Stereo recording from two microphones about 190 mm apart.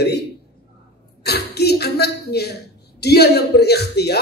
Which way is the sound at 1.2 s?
60° left (ahead or behind).